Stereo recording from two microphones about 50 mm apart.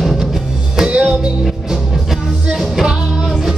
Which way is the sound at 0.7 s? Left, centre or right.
Centre.